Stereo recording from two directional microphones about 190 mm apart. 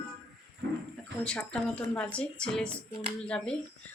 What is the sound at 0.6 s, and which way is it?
Speech, 65° right (ahead or behind).